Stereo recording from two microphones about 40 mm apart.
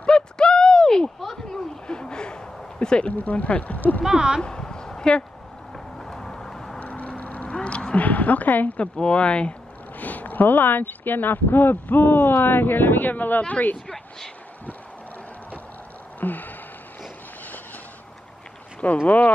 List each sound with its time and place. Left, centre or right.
0.0 s a sound: left
3.1 s speech: left
4.0 s speech: centre
4.4 s a sound: centre
5.9 s vehicle: centre
6.8 s vehicle: left
7.5 s a sound: left
8.0 s a woman's voice: left
8.7 s speech: left
9.9 s speech: left
13.4 s speech: left
16.2 s a sound: left
19.0 s speech: left